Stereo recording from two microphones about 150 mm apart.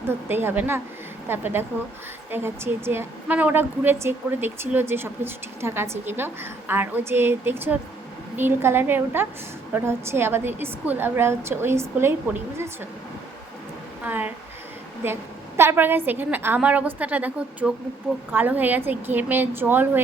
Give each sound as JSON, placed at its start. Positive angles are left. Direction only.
{"t": 0.1, "sound": "a woman's voice", "side_deg": -15}
{"t": 14.0, "sound": "a woman's voice", "side_deg": -10}